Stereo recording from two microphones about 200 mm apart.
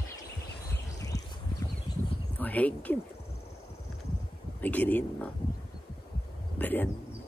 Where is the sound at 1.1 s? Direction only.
60° left (ahead or behind).